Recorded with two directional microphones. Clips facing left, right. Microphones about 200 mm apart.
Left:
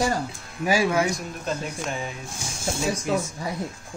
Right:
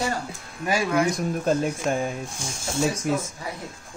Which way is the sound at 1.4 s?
45° right (ahead or behind).